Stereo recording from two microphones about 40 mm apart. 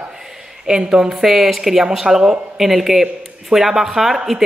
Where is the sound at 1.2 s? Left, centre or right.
Centre.